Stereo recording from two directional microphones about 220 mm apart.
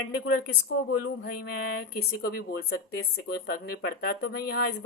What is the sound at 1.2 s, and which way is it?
Speech, 45° left (ahead or behind).